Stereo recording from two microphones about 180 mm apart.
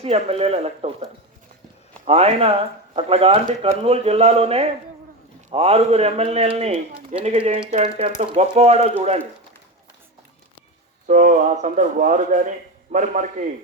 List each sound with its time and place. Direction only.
0.0 s speech: 35° right (ahead or behind)
2.0 s speech: 35° right (ahead or behind)
11.1 s speech: 45° right (ahead or behind)